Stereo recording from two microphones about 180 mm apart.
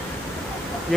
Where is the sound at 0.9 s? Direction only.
Centre (ahead or behind).